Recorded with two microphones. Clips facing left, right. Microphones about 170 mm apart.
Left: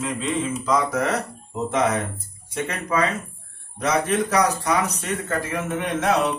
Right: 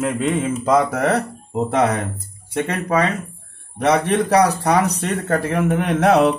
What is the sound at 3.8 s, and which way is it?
Speech, 70° right (ahead or behind).